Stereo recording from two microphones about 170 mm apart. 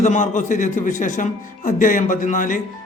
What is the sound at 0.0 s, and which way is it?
A man's voice, 45° left (ahead or behind).